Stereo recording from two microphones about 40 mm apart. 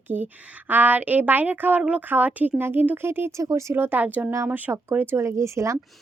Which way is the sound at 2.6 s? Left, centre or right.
Right.